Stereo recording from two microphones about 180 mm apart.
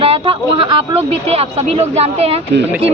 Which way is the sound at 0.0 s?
30° right (ahead or behind).